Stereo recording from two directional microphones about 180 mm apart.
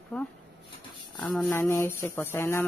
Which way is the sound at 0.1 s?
5° left (ahead or behind).